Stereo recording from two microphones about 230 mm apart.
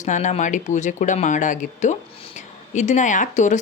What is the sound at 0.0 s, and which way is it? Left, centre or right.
Speech, left.